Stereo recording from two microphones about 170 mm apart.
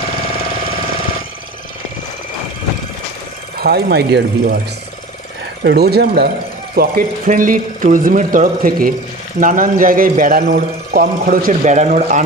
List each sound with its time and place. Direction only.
3.5 s speech: 70° right (ahead or behind)
5.6 s a man's voice: 70° right (ahead or behind); by 12.3 s 45° right (ahead or behind)